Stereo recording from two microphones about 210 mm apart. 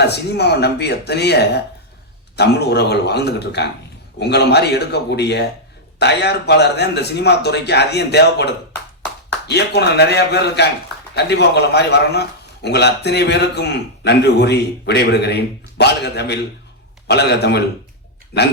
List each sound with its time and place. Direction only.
0.1 s a man's voice: 50° left (ahead or behind)